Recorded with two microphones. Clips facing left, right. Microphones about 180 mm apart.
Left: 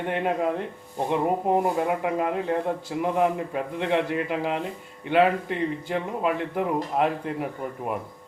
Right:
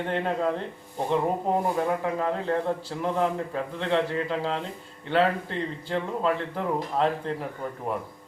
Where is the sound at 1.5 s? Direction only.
15° left (ahead or behind).